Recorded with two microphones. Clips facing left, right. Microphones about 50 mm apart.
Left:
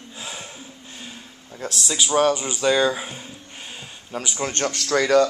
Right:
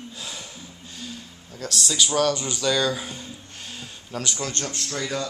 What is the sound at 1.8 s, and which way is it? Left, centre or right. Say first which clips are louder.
Speech: left 3 dB; left.